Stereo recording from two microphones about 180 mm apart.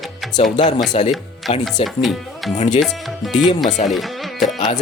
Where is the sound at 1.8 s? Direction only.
30° left (ahead or behind).